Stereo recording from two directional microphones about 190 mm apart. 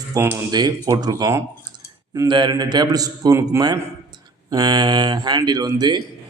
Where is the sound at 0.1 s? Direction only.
15° right (ahead or behind).